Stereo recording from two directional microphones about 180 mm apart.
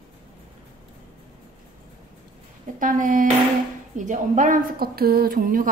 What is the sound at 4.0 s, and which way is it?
A woman's voice, 45° right (ahead or behind).